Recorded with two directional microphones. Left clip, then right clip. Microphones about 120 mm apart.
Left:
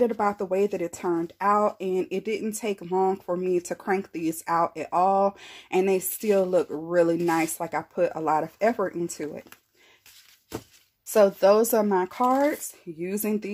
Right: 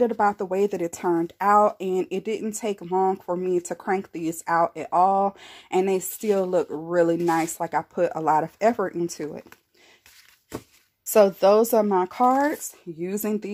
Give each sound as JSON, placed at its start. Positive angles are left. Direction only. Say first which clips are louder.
{"t": 0.0, "sound": "a woman's voice", "louder": "right 2 dB", "side_deg": -25}
{"t": 11.3, "sound": "a woman's voice", "louder": "right 2 dB", "side_deg": -30}
{"t": 12.1, "sound": "speech", "louder": "right 2 dB", "side_deg": -40}
{"t": 13.0, "sound": "a woman's voice", "louder": "right 1 dB", "side_deg": -25}